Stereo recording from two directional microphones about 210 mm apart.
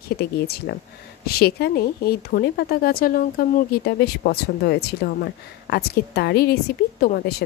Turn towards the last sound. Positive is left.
turn(degrees=45)  # may be behind; listen again after turning